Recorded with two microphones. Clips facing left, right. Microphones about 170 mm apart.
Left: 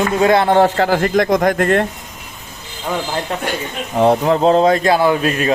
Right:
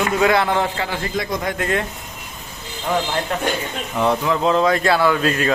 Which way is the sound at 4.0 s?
35° left (ahead or behind).